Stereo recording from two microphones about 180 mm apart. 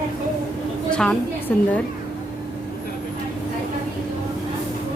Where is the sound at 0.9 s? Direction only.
5° left (ahead or behind).